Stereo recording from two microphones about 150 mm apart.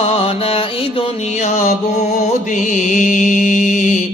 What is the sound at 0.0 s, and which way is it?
Mantra, 40° left (ahead or behind).